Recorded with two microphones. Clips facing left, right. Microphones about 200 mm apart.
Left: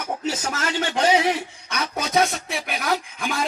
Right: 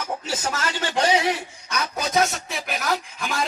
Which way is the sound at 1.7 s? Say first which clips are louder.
Left 1 dB; 30° left (ahead or behind).